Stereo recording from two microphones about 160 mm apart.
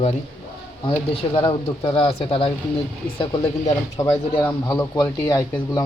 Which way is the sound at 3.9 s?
15° left (ahead or behind).